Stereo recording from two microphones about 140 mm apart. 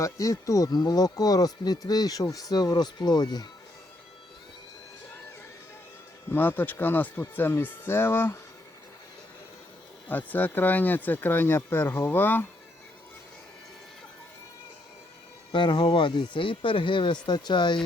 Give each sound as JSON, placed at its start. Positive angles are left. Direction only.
{"t": 0.0, "sound": "speech", "side_deg": 25}
{"t": 6.3, "sound": "speech", "side_deg": 15}
{"t": 10.1, "sound": "speech", "side_deg": 15}
{"t": 15.5, "sound": "speech", "side_deg": 35}